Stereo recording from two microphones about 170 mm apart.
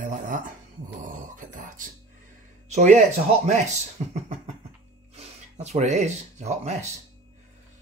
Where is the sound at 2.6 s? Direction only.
45° right (ahead or behind).